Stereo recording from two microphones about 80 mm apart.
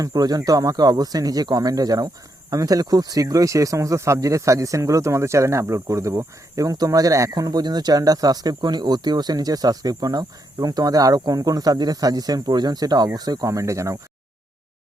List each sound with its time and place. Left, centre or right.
0.0 s speech: right